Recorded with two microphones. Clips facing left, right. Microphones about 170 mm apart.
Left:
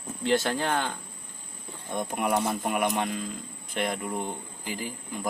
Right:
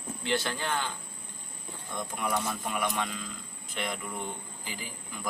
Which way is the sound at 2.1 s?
60° left (ahead or behind).